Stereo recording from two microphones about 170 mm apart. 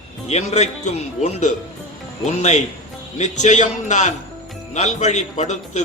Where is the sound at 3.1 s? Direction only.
45° left (ahead or behind).